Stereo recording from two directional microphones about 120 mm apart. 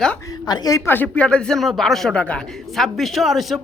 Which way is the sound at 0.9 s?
15° left (ahead or behind).